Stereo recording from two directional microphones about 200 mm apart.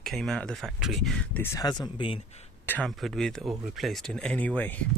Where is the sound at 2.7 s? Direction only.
5° left (ahead or behind).